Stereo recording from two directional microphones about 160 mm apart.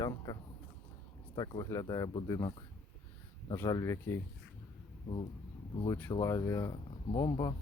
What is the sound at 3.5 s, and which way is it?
Speech, 20° left (ahead or behind).